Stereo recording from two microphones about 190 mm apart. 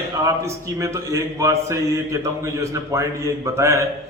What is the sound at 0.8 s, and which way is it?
A man's voice, 15° right (ahead or behind).